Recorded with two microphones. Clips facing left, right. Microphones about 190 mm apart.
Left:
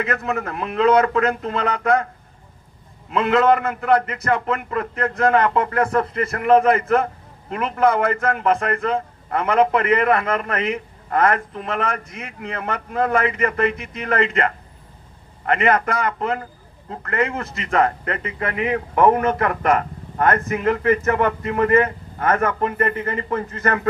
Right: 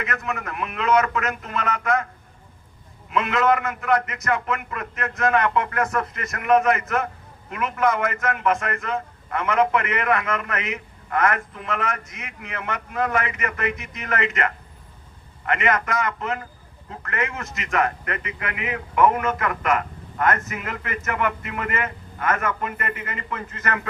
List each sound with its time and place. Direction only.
0.0 s a man's voice: 30° left (ahead or behind)
3.1 s a man's voice: 30° left (ahead or behind)